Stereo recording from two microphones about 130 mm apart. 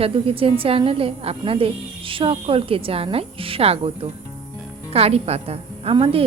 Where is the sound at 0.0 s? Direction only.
45° right (ahead or behind).